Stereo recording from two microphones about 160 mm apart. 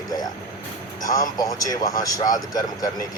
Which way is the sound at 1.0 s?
25° left (ahead or behind).